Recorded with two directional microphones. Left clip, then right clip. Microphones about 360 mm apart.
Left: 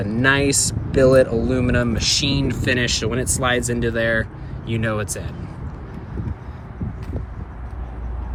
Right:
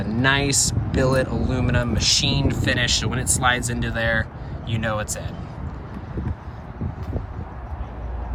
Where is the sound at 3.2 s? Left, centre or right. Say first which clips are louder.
Right 2 dB; right.